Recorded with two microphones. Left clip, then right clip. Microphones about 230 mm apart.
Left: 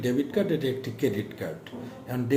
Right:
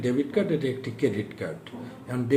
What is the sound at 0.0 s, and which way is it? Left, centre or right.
A man's voice, centre.